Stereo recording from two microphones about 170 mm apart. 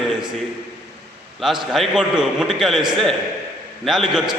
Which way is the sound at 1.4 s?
Centre (ahead or behind).